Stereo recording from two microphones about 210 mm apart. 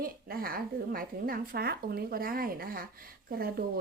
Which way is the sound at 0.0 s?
45° right (ahead or behind).